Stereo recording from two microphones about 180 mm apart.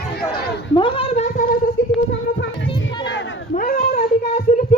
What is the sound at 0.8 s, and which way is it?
Cat, 30° left (ahead or behind).